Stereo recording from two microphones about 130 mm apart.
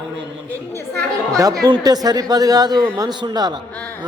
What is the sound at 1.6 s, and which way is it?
A woman's voice, 30° right (ahead or behind).